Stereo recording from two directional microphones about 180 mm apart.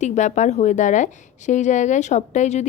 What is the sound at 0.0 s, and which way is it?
A woman's voice, 40° left (ahead or behind).